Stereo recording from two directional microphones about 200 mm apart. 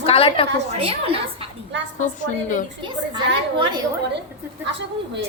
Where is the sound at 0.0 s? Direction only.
30° left (ahead or behind).